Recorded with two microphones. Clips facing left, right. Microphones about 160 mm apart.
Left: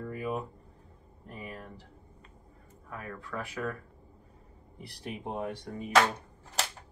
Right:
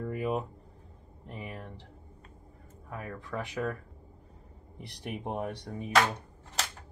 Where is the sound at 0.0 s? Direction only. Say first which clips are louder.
Right 3 dB; 20° right (ahead or behind).